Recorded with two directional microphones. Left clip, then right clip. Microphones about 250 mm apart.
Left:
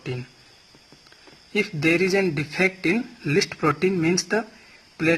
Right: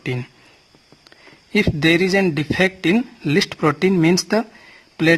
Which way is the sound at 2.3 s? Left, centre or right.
Right.